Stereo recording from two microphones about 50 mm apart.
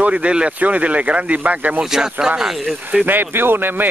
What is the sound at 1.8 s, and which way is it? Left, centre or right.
Speech, centre.